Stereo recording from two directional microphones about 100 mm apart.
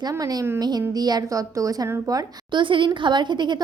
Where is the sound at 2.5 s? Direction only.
55° right (ahead or behind).